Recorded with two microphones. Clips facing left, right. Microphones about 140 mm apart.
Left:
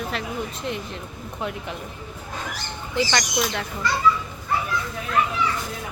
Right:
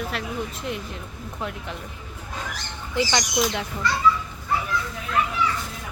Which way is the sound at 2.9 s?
15° right (ahead or behind).